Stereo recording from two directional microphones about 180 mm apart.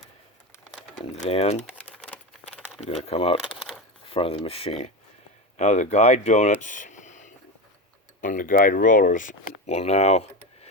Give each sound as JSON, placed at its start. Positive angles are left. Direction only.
{"t": 1.1, "sound": "speech", "side_deg": 35}
{"t": 1.8, "sound": "a sound", "side_deg": 5}
{"t": 2.8, "sound": "speech", "side_deg": 35}